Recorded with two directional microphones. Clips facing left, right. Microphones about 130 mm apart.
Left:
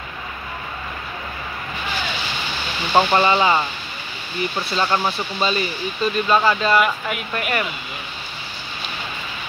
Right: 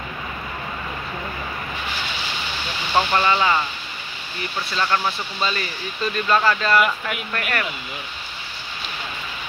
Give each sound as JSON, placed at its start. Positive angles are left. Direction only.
{"t": 2.9, "sound": "speech", "side_deg": 25}